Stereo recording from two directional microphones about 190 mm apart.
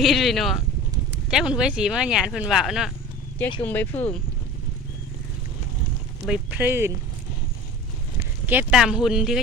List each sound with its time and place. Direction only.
0.0 s speech: centre (ahead or behind)
3.6 s speech: 10° left (ahead or behind)
6.2 s speech: 5° right (ahead or behind)
8.4 s speech: 5° right (ahead or behind)